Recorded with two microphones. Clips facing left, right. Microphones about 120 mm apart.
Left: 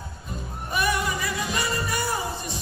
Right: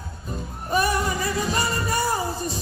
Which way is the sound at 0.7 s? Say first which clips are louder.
Right 3 dB; 35° right (ahead or behind).